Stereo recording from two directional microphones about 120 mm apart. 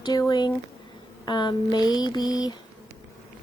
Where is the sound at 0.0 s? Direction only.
35° left (ahead or behind).